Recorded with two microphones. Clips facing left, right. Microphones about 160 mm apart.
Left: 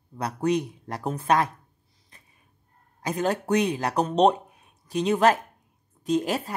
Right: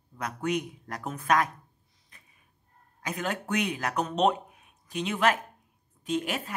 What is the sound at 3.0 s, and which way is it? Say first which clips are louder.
Speech: left 7 dB; 35° left (ahead or behind).